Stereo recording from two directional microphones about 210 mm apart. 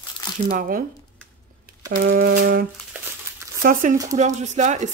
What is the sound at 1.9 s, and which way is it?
A woman's voice, 50° right (ahead or behind).